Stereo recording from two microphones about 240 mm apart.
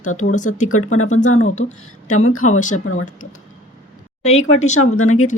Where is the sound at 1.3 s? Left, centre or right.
Left.